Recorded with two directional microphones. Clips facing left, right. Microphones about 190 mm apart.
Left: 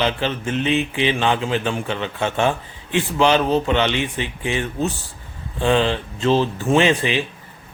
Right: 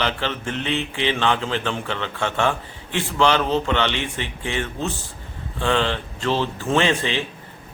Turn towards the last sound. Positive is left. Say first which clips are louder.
# left 3 dB
turn(degrees=15)  # may be behind; listen again after turning